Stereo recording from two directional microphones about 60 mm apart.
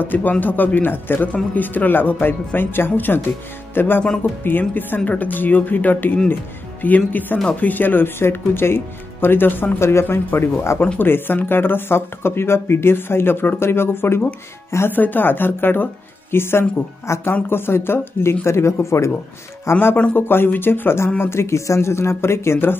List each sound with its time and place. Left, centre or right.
0.0 s speech: left
9.8 s speech: left
19.7 s speech: left